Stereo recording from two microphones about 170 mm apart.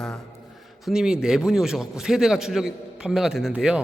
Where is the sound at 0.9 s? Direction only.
5° right (ahead or behind).